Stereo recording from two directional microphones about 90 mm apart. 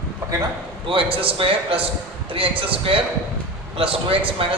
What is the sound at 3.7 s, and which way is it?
Speech, 90° right.